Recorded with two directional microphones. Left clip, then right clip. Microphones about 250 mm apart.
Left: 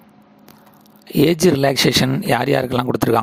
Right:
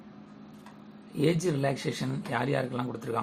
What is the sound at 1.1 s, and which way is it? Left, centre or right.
Speech, left.